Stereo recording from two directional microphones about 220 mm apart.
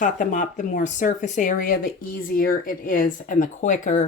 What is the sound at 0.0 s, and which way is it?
Speech, 35° left (ahead or behind).